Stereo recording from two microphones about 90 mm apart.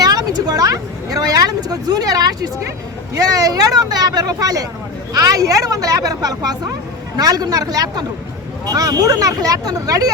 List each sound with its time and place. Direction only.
0.0 s speech: 45° right (ahead or behind)